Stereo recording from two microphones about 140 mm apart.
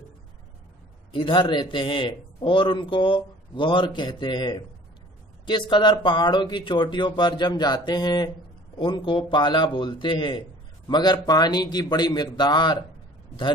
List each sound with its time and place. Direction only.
1.1 s a man's voice: 35° left (ahead or behind)